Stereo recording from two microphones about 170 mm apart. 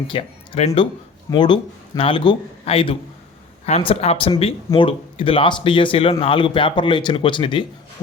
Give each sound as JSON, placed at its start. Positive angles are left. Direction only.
{"t": 0.1, "sound": "speech", "side_deg": 35}
{"t": 1.3, "sound": "speech", "side_deg": 25}